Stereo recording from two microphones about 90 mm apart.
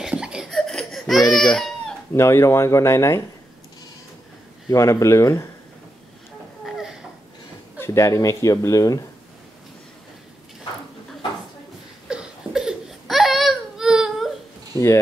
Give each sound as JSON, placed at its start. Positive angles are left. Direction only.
{"t": 0.0, "sound": "laughter", "side_deg": -10}
{"t": 0.5, "sound": "laughter", "side_deg": 5}
{"t": 1.3, "sound": "baby cry", "side_deg": 5}
{"t": 2.1, "sound": "speech", "side_deg": 30}
{"t": 4.6, "sound": "speech", "side_deg": 35}
{"t": 6.6, "sound": "a sound", "side_deg": -5}
{"t": 7.8, "sound": "speech", "side_deg": 35}
{"t": 12.1, "sound": "baby cry", "side_deg": -10}